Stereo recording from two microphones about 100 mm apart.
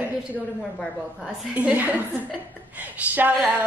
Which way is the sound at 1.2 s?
10° right (ahead or behind).